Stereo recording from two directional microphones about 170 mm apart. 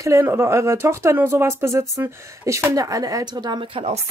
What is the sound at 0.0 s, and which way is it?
A woman's voice, 15° right (ahead or behind).